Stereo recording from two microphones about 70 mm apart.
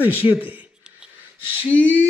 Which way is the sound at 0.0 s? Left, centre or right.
Right.